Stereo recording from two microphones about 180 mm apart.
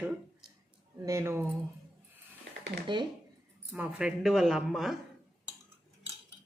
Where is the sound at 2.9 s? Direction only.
25° right (ahead or behind).